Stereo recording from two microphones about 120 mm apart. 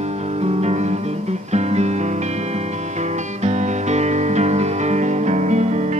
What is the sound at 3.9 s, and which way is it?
Music, 70° right (ahead or behind).